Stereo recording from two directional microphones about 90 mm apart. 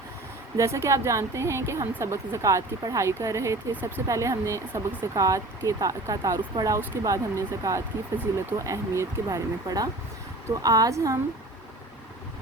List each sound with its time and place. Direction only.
0.5 s speech: 35° right (ahead or behind)